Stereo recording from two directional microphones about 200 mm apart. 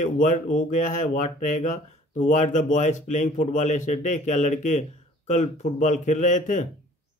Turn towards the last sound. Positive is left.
turn(degrees=40)  # may be behind; listen again after turning